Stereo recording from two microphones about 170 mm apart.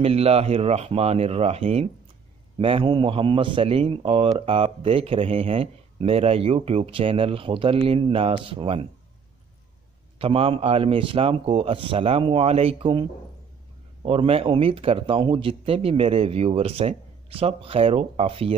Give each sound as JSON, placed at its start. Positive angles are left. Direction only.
{"t": 0.0, "sound": "a man's voice", "side_deg": -35}
{"t": 10.1, "sound": "a man's voice", "side_deg": -35}
{"t": 14.0, "sound": "a man's voice", "side_deg": -35}